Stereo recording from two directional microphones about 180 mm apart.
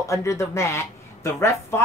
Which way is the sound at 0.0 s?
15° left (ahead or behind).